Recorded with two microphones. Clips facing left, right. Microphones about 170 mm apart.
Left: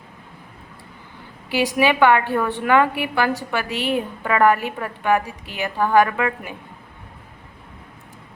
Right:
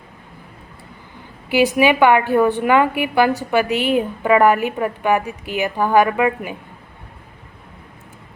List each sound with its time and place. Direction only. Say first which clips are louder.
1.5 s a woman's voice: right 4 dB; 15° right (ahead or behind)